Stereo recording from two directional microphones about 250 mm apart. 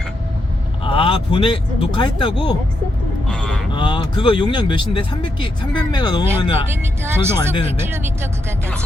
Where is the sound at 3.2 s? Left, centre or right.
Centre.